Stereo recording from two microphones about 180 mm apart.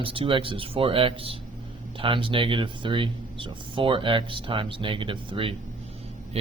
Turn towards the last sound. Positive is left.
turn(degrees=-30)  # may be behind; listen again after turning